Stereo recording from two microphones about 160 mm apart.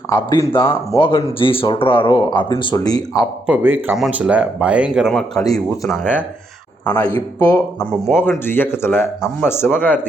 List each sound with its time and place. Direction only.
0.1 s a man's voice: 20° left (ahead or behind)
0.7 s speech: 30° left (ahead or behind)
3.4 s speech: 10° right (ahead or behind)
5.4 s a man's voice: 20° left (ahead or behind)